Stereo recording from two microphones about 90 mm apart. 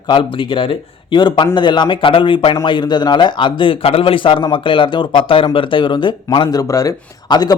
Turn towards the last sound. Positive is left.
turn(degrees=50)  # may be behind; listen again after turning